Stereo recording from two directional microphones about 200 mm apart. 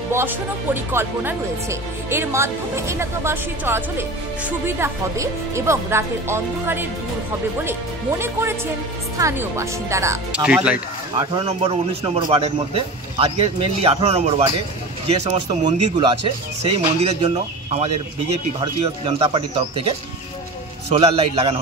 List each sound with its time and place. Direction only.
0.9 s speech: 10° right (ahead or behind)
8.2 s speech: 10° right (ahead or behind)
11.1 s speech: 30° right (ahead or behind)
20.9 s speech: 30° right (ahead or behind)